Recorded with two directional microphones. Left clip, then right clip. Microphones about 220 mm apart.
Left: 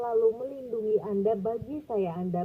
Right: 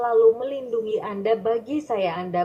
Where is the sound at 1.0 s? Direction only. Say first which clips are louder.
Right 5 dB; 30° left (ahead or behind).